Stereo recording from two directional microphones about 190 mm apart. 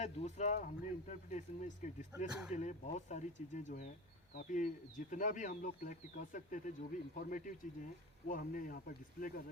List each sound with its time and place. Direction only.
0.0 s speech: 35° left (ahead or behind)
2.1 s speech: 5° right (ahead or behind)
2.5 s speech: 40° left (ahead or behind)